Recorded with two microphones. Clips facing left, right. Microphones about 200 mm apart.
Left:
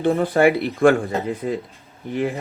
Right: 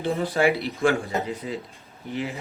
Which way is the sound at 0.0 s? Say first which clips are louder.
Left 6 dB; 55° left (ahead or behind).